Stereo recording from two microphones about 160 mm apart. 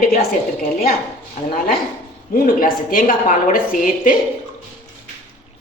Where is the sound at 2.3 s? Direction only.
65° left (ahead or behind).